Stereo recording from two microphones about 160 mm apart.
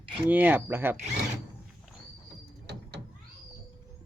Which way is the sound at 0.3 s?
10° right (ahead or behind).